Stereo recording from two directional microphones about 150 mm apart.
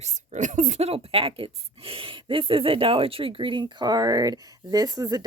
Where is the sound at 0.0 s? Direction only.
55° right (ahead or behind).